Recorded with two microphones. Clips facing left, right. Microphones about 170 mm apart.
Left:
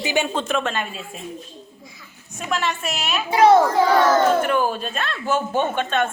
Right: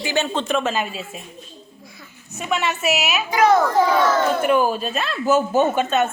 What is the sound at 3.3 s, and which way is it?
Speech, 30° left (ahead or behind).